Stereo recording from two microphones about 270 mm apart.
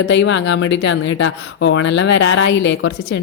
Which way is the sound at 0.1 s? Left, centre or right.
Left.